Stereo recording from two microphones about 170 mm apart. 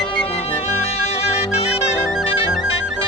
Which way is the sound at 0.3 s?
35° left (ahead or behind).